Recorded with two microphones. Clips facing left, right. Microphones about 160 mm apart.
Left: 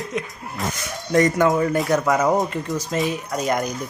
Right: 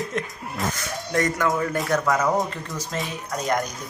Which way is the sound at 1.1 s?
20° left (ahead or behind).